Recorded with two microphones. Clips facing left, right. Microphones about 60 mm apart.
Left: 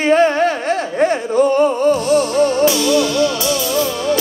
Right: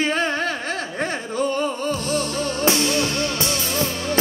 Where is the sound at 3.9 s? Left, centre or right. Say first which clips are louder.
Left 8 dB; left.